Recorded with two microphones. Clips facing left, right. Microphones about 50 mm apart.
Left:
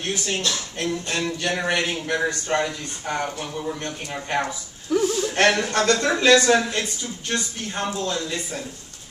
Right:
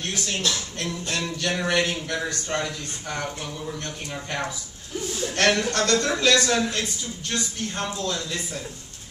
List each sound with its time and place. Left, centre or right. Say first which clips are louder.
0.0 s speech: left 2 dB; centre
4.9 s a sound: left 11 dB; left
5.3 s speech: even; centre